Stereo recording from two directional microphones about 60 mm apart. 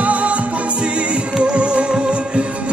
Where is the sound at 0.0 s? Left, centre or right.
Right.